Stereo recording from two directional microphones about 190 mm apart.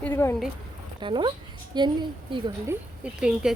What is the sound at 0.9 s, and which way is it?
A woman's voice, 25° right (ahead or behind).